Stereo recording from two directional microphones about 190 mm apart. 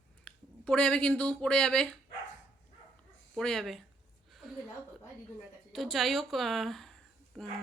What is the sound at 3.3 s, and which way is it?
Speech, centre (ahead or behind).